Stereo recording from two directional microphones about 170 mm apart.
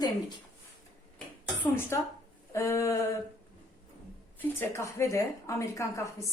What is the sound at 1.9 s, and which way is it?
Speech, 15° left (ahead or behind).